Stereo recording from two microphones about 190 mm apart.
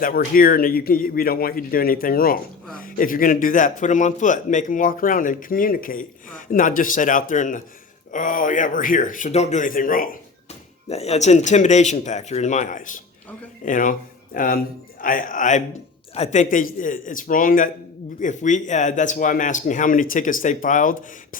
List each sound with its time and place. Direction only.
0.0 s a man's voice: 50° left (ahead or behind)
10.8 s a man's voice: 35° left (ahead or behind)